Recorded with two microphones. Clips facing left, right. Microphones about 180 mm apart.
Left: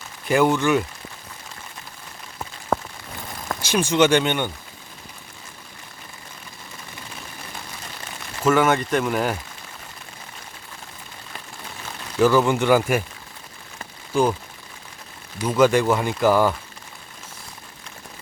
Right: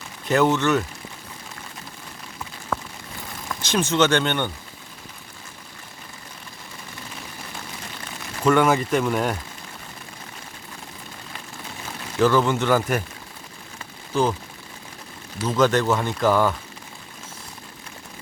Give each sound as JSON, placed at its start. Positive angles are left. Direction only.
{"t": 0.3, "sound": "speech", "side_deg": 10}
{"t": 2.7, "sound": "a sound", "side_deg": 30}
{"t": 3.6, "sound": "speech", "side_deg": 10}
{"t": 8.4, "sound": "speech", "side_deg": 0}
{"t": 12.2, "sound": "speech", "side_deg": 10}
{"t": 14.1, "sound": "speech", "side_deg": 10}
{"t": 15.4, "sound": "speech", "side_deg": 10}